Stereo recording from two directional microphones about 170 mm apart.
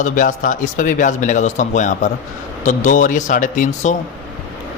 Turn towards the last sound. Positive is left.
turn(degrees=45)  # may be behind; listen again after turning